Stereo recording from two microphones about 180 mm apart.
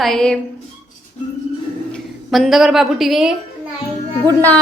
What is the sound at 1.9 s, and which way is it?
A woman's voice, centre (ahead or behind).